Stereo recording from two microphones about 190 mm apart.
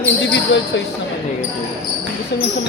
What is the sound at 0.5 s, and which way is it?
Speech, 70° left (ahead or behind).